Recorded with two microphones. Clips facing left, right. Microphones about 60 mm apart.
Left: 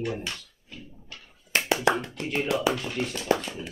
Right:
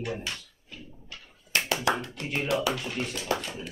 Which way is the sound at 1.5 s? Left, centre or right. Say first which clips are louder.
Left 3 dB; left.